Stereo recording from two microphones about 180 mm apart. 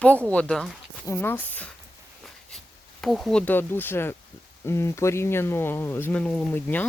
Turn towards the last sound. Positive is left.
turn(degrees=10)  # may be behind; listen again after turning